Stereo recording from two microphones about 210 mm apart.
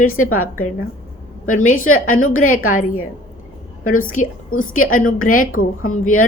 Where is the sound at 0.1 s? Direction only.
90° left.